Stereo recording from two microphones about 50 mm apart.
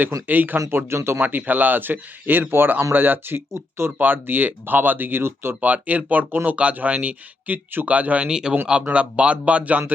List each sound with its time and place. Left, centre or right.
0.3 s speech: right
0.9 s speech: right
1.2 s speech: right
3.5 s speech: right
3.9 s speech: right
5.5 s speech: right
7.9 s speech: right
8.3 s speech: centre